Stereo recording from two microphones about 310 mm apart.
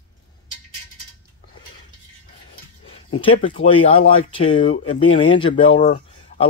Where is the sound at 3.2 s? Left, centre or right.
Centre.